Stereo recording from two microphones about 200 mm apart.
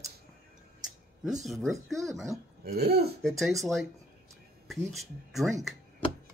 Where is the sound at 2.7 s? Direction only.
50° right (ahead or behind).